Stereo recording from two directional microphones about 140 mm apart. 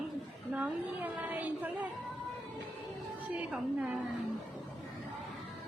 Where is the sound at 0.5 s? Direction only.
10° right (ahead or behind).